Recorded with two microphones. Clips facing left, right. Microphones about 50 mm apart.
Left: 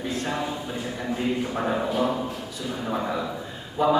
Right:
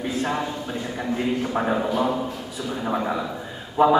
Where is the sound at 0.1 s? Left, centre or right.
Centre.